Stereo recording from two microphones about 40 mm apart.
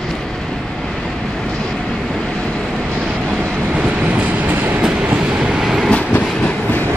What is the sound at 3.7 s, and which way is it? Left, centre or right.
Train, right.